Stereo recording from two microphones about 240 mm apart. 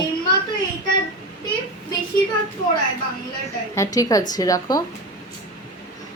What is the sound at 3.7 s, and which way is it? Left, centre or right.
A woman's voice, centre.